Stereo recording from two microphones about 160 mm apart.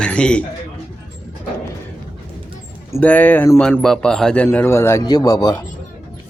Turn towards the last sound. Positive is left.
turn(degrees=25)  # may be behind; listen again after turning